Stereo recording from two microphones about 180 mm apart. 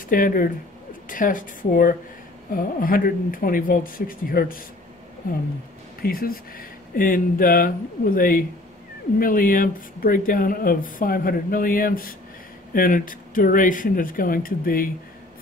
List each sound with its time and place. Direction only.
0.1 s speech: 50° left (ahead or behind)
6.0 s speech: 55° left (ahead or behind)